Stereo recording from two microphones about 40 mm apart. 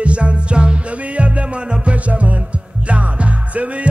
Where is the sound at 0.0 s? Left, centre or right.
Right.